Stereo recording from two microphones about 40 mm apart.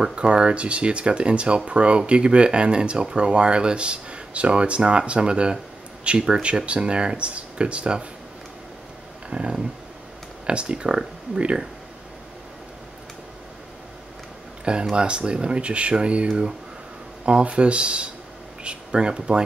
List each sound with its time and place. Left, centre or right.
0.1 s speech: right
9.3 s a sound: right
10.4 s speech: right
14.6 s speech: right